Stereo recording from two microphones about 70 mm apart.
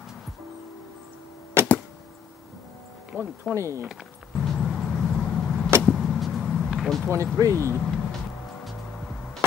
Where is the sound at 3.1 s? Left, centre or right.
Right.